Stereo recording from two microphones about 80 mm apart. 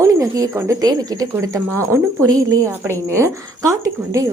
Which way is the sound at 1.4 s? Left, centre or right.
Right.